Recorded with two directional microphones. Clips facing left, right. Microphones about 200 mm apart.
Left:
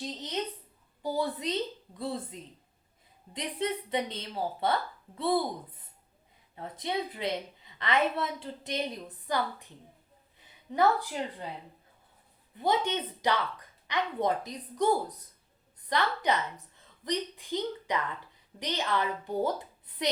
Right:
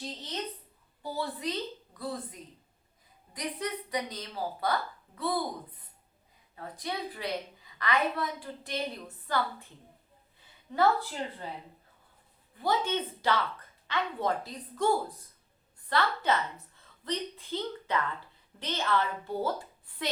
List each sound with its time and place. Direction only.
1.1 s a woman's voice: 20° left (ahead or behind)
6.6 s a woman's voice: 20° left (ahead or behind)
12.5 s a woman's voice: 20° left (ahead or behind)